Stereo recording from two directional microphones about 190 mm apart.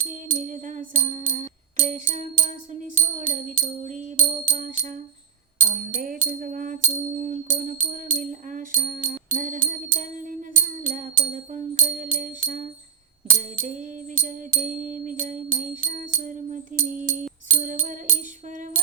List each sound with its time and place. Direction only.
0.0 s music: 45° right (ahead or behind)